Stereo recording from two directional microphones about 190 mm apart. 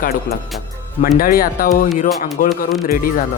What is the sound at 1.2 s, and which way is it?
Speech, 50° left (ahead or behind).